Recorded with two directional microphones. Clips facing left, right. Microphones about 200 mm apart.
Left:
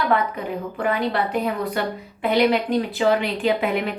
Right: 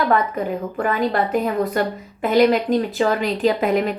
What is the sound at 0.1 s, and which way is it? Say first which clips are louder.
A woman's voice: right 2 dB; 45° right (ahead or behind).